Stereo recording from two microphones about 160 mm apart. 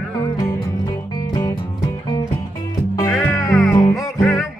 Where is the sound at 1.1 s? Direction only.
25° left (ahead or behind).